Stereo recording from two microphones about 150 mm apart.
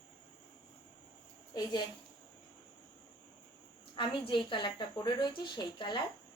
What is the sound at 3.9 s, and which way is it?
A woman's voice, 30° left (ahead or behind).